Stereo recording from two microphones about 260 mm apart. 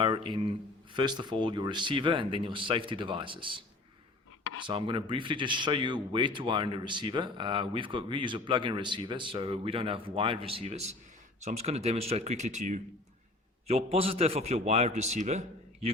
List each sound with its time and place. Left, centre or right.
0.0 s speech: centre
4.6 s speech: centre